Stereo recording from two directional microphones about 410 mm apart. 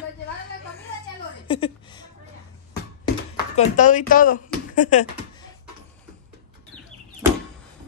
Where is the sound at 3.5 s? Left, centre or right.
Centre.